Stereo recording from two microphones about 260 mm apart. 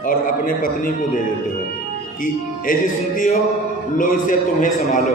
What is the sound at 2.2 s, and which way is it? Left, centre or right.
Music, left.